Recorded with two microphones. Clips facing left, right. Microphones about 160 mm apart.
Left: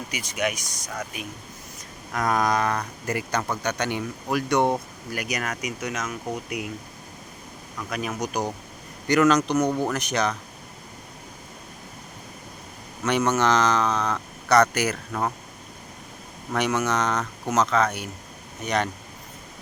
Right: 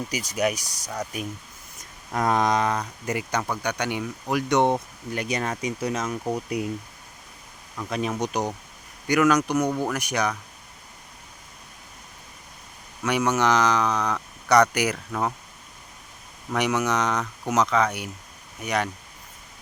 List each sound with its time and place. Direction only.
0.1 s speech: 40° right (ahead or behind)
2.1 s speech: 25° right (ahead or behind)
7.8 s speech: 25° right (ahead or behind)
9.0 s speech: 10° right (ahead or behind)
13.1 s speech: 10° right (ahead or behind)
16.6 s speech: 15° right (ahead or behind)